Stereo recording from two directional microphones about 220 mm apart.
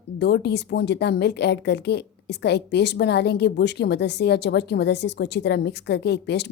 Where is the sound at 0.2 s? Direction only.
50° left (ahead or behind).